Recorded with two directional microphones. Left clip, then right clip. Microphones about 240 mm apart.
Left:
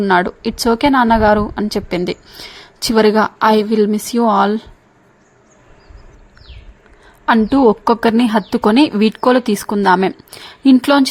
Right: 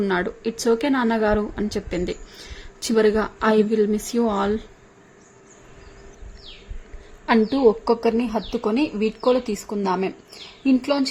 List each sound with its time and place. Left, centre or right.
0.0 s a woman's voice: left
7.6 s speech: left
8.0 s speech: left
8.4 s speech: left
8.7 s speech: left